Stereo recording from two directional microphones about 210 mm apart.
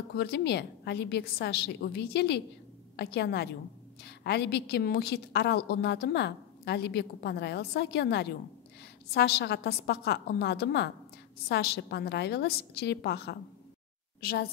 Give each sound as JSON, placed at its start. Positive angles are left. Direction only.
{"t": 0.1, "sound": "a woman's voice", "side_deg": 50}